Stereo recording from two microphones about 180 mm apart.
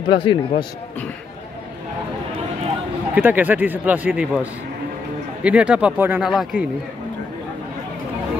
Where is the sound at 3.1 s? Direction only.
10° right (ahead or behind).